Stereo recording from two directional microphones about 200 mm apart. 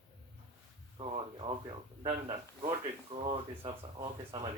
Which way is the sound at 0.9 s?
25° right (ahead or behind).